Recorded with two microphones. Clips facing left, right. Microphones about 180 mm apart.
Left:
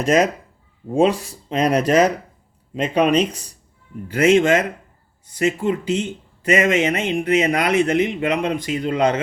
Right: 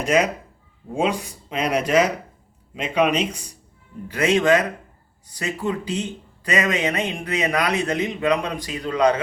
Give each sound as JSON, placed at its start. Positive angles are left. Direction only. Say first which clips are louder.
{"t": 0.9, "sound": "speech", "louder": "left 6 dB", "side_deg": 35}
{"t": 4.1, "sound": "speech", "louder": "left 3 dB", "side_deg": 30}